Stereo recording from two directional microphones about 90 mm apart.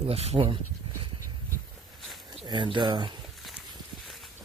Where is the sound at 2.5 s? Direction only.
60° right (ahead or behind).